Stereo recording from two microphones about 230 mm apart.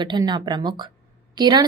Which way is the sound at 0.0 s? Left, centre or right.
Centre.